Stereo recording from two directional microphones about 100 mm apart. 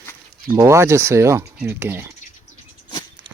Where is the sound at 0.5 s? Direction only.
30° right (ahead or behind).